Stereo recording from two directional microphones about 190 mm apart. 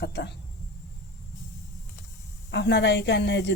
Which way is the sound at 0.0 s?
60° left (ahead or behind).